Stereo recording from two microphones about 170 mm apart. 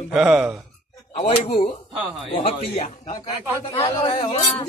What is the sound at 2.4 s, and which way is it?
A man's voice, 45° left (ahead or behind).